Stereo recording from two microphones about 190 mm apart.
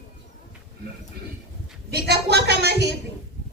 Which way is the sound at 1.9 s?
60° right (ahead or behind).